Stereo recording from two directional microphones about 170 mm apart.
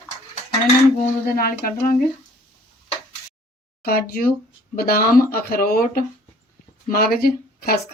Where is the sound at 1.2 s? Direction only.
60° left (ahead or behind).